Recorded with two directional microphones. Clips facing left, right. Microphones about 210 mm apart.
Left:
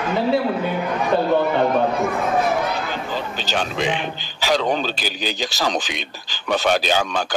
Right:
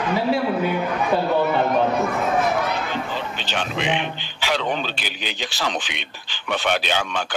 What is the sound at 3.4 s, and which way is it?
Speech, 40° left (ahead or behind).